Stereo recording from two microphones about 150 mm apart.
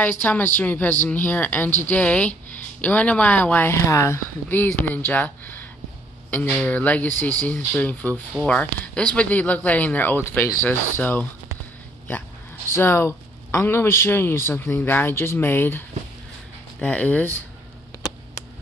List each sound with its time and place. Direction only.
0.0 s speech: 10° left (ahead or behind)
12.6 s speech: 15° left (ahead or behind)
16.8 s speech: 10° left (ahead or behind)